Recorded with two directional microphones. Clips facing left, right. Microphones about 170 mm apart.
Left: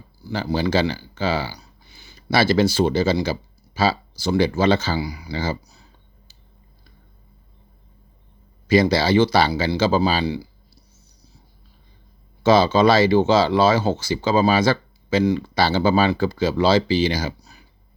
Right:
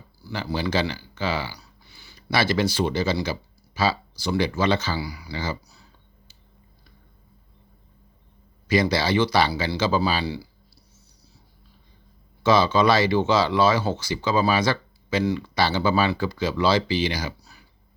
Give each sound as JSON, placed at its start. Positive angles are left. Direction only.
{"t": 0.2, "sound": "speech", "side_deg": 20}
{"t": 8.6, "sound": "speech", "side_deg": 30}
{"t": 12.4, "sound": "speech", "side_deg": 30}